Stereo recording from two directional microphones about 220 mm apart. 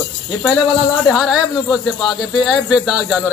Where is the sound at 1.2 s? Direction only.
Centre (ahead or behind).